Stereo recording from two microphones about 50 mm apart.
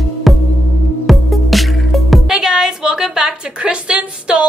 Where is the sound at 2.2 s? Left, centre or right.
Centre.